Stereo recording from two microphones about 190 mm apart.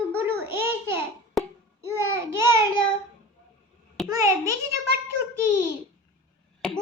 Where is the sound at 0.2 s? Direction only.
10° right (ahead or behind).